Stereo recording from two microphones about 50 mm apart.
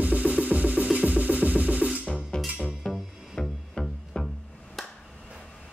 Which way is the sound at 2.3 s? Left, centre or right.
Centre.